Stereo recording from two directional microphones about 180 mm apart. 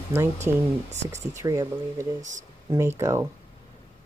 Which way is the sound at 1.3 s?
20° right (ahead or behind).